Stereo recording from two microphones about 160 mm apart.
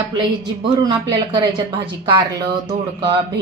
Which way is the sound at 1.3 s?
25° right (ahead or behind).